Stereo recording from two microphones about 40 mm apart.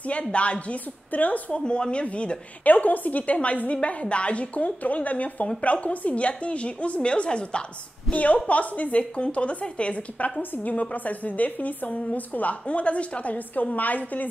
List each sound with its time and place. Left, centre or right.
0.0 s a woman's voice: left
1.5 s speech: left
2.6 s a woman's voice: left
8.1 s a woman's voice: left